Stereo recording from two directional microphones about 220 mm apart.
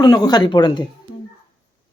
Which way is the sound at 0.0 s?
20° left (ahead or behind).